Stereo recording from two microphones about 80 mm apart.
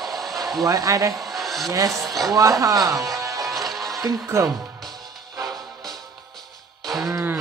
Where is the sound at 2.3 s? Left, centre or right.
Right.